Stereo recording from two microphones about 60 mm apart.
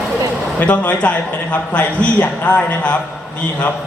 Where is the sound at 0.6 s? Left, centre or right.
Left.